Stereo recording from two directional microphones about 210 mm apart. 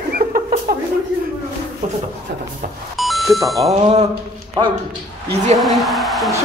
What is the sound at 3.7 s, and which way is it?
Speech, 30° right (ahead or behind).